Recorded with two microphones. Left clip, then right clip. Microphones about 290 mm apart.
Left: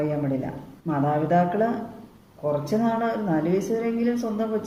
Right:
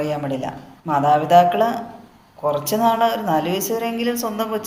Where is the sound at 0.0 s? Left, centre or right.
Right.